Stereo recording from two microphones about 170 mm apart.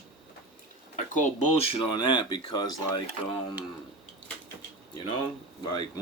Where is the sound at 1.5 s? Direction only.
35° left (ahead or behind).